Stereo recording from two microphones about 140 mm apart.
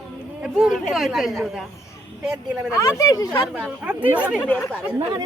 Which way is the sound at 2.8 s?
25° left (ahead or behind).